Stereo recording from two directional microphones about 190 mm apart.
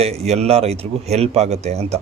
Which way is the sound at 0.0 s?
35° right (ahead or behind).